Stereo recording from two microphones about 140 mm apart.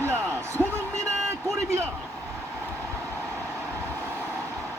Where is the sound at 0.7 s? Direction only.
20° right (ahead or behind).